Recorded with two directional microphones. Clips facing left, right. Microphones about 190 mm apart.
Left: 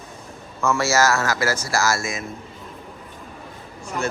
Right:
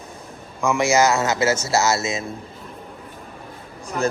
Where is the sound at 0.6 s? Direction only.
15° right (ahead or behind).